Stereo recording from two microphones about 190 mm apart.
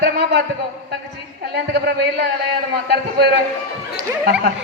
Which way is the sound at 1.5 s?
60° right (ahead or behind).